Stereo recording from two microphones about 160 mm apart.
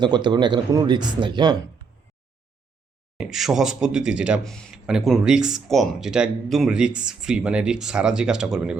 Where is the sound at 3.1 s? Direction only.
Centre (ahead or behind).